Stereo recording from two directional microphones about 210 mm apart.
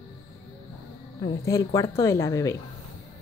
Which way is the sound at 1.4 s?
15° left (ahead or behind).